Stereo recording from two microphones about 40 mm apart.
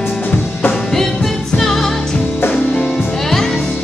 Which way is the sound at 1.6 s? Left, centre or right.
Centre.